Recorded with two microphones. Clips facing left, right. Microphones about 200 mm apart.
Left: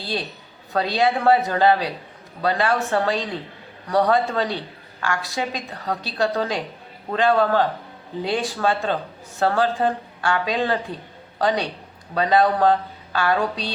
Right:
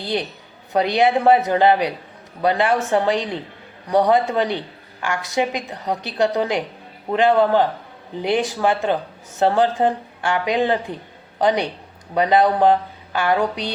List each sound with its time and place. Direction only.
0.0 s speech: 20° right (ahead or behind)